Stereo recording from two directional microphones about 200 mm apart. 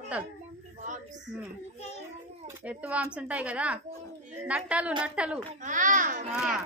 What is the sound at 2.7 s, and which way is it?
A woman's voice, 5° right (ahead or behind).